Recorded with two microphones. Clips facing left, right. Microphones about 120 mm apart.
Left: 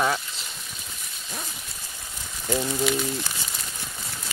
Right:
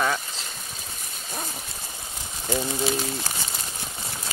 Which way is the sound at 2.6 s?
30° right (ahead or behind).